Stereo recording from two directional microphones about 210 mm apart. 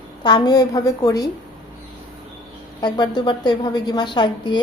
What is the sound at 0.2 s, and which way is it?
A woman's voice, 20° left (ahead or behind).